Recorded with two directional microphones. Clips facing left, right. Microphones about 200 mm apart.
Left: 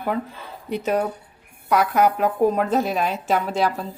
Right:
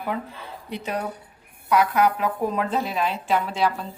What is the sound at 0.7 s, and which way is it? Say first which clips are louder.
A woman's voice: left 7 dB; 45° left (ahead or behind).